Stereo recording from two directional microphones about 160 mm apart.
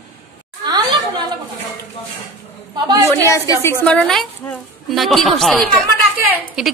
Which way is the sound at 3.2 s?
15° left (ahead or behind).